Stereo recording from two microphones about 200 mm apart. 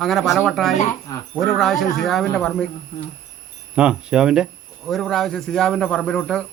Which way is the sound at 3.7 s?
5° right (ahead or behind).